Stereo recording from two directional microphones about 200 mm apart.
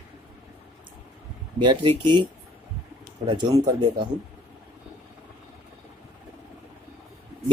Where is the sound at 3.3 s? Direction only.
25° right (ahead or behind).